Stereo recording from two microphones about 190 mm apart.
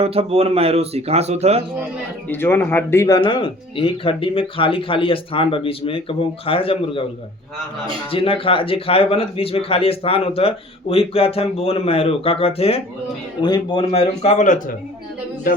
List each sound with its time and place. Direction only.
0.0 s speech: 30° right (ahead or behind)
2.3 s speech: 10° left (ahead or behind)
3.2 s speech: 25° left (ahead or behind)
8.1 s a man's voice: 30° left (ahead or behind)